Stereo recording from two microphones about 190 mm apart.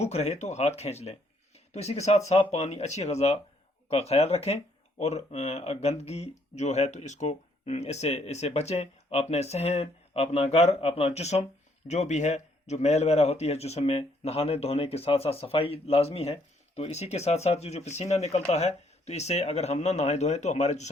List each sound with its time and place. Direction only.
0.0 s a man's voice: 35° left (ahead or behind)